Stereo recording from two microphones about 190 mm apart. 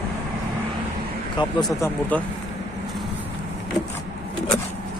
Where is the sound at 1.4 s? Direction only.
25° left (ahead or behind).